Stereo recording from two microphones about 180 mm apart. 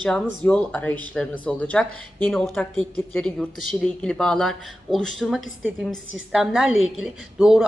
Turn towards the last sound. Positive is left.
turn(degrees=0)  # may be behind; listen again after turning